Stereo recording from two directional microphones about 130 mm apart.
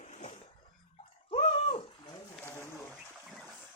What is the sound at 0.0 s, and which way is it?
Cough, 60° left (ahead or behind).